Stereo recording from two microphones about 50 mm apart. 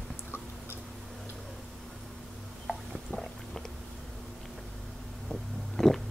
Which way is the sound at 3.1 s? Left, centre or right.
Centre.